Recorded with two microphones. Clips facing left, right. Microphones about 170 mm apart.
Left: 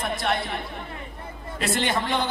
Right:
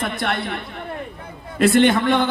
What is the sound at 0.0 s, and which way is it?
A man's voice, 60° right (ahead or behind).